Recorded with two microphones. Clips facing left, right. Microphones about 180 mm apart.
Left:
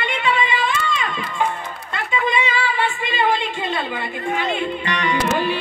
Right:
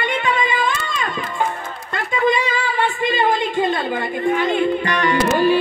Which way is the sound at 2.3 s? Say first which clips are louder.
Right 1 dB; 45° right (ahead or behind).